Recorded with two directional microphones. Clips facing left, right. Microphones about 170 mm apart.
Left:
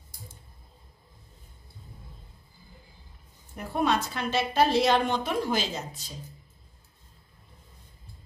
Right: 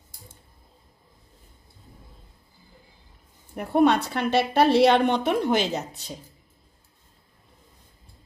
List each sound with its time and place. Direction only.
3.5 s a woman's voice: 60° right (ahead or behind)